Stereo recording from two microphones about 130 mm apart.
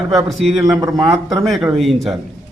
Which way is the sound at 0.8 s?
25° right (ahead or behind).